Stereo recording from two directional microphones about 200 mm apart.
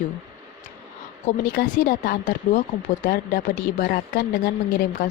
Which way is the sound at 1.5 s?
45° left (ahead or behind).